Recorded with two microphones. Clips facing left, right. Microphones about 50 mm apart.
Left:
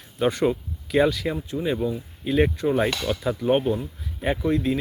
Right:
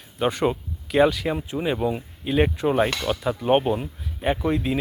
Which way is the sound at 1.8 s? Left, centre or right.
Right.